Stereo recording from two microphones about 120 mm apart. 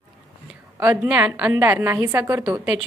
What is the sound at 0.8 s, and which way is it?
A woman's voice, 15° right (ahead or behind).